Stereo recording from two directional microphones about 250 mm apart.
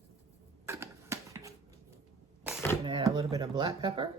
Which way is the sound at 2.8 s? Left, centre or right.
Centre.